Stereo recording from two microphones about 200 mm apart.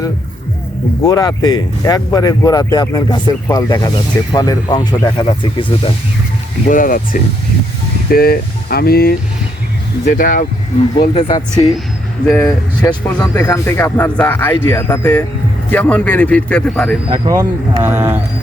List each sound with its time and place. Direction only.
1.0 s speech: 20° left (ahead or behind)
6.7 s speech: 40° left (ahead or behind)
11.0 s speech: 25° left (ahead or behind)
12.2 s speech: 10° left (ahead or behind)
17.2 s speech: 15° right (ahead or behind)